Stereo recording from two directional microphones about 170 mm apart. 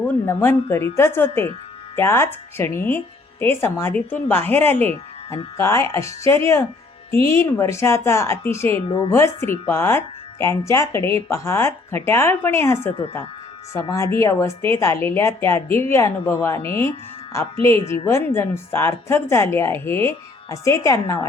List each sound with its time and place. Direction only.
0.0 s speech: 15° left (ahead or behind)